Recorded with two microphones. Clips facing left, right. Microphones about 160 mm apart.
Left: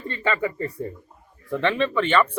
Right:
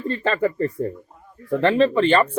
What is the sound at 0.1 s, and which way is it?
Speech, 45° right (ahead or behind).